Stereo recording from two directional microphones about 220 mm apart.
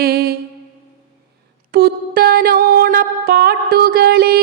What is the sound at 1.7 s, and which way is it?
Music, 45° right (ahead or behind).